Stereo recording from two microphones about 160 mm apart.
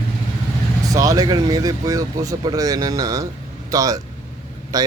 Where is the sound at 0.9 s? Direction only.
20° right (ahead or behind).